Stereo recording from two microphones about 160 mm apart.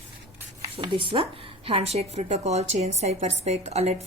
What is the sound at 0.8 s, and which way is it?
A woman's voice, 30° right (ahead or behind).